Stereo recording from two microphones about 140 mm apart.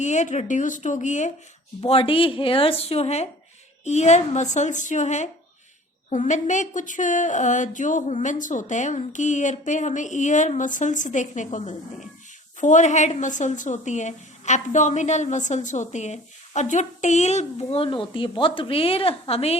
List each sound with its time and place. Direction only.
0.0 s a woman's voice: 60° left (ahead or behind)
1.8 s a woman's voice: 40° left (ahead or behind)